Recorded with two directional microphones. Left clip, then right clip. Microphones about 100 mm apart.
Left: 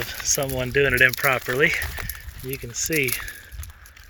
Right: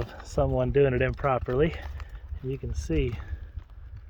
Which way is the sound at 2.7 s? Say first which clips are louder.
Left 8 dB; 15° right (ahead or behind).